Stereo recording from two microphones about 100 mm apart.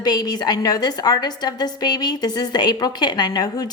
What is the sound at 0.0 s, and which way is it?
A woman's voice, 45° left (ahead or behind).